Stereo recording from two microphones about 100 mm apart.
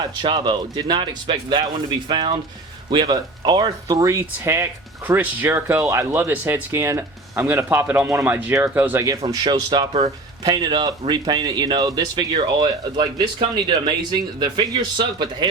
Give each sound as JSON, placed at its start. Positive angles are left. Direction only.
{"t": 0.0, "sound": "speech", "side_deg": -50}
{"t": 3.8, "sound": "speech", "side_deg": -30}
{"t": 9.0, "sound": "speech", "side_deg": -40}